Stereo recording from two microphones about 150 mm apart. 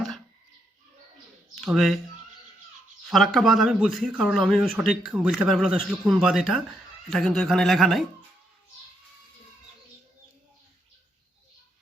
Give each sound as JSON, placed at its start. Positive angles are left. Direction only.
{"t": 1.5, "sound": "speech", "side_deg": 0}
{"t": 3.1, "sound": "a man's voice", "side_deg": 0}